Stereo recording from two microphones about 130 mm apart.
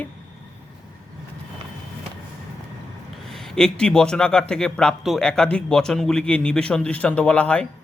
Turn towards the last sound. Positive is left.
turn(degrees=10)  # may be behind; listen again after turning